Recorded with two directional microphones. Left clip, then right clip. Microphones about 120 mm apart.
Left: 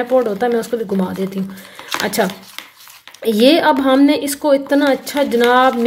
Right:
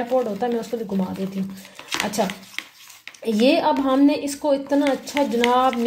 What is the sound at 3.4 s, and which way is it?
A woman's voice, 40° left (ahead or behind).